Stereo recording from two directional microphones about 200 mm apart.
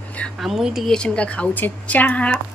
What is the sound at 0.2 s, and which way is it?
Speech, centre (ahead or behind).